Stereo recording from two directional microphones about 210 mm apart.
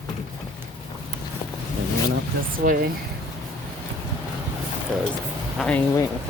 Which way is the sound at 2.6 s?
40° right (ahead or behind).